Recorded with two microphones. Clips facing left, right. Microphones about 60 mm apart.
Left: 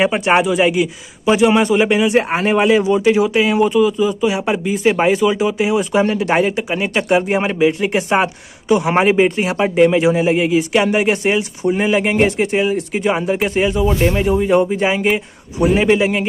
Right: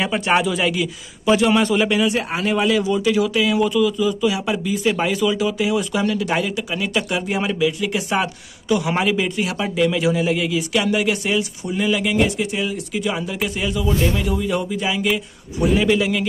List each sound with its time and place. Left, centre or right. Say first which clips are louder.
0.0 s a man's voice: left 5 dB; left